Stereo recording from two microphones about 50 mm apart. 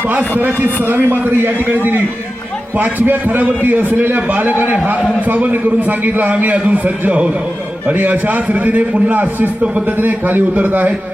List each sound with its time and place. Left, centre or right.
0.1 s a man's voice: right